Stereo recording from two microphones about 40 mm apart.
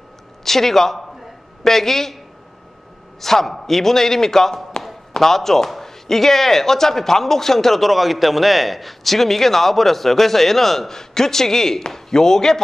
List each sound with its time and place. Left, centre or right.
0.4 s a man's voice: centre
3.2 s a man's voice: centre